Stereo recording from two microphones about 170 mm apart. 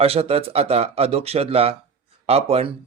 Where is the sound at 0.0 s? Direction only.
35° right (ahead or behind).